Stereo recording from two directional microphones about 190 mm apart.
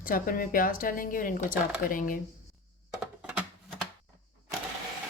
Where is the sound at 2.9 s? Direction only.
5° right (ahead or behind).